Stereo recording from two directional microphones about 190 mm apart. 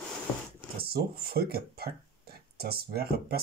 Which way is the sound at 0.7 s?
55° right (ahead or behind).